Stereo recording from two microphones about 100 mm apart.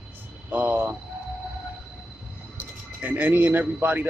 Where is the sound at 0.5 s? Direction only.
15° right (ahead or behind).